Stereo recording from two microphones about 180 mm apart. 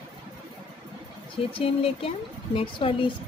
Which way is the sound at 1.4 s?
30° left (ahead or behind).